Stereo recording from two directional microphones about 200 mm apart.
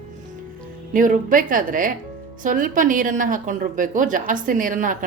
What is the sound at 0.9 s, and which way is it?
A woman's voice, 40° right (ahead or behind).